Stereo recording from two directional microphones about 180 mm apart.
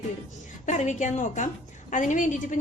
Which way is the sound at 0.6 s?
40° left (ahead or behind).